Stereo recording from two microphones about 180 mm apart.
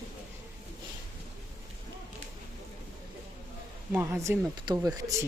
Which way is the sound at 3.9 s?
15° right (ahead or behind).